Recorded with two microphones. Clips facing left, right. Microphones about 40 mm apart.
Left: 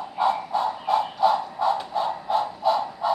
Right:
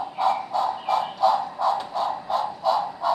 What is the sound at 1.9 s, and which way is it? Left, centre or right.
Mechanisms, centre.